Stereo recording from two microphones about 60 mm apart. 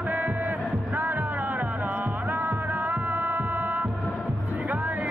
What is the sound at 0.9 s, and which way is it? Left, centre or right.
Music, right.